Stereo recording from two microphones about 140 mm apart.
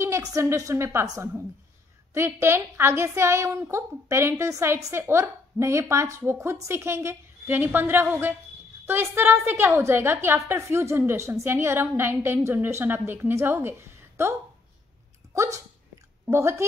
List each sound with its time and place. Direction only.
0.0 s a woman's voice: 25° right (ahead or behind)
15.3 s a woman's voice: 20° right (ahead or behind)